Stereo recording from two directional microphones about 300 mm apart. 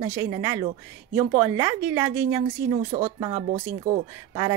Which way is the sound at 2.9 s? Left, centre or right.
Right.